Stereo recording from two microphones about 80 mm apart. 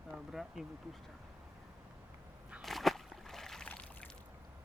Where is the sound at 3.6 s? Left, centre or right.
Centre.